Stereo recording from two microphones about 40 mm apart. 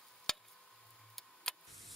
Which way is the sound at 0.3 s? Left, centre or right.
Centre.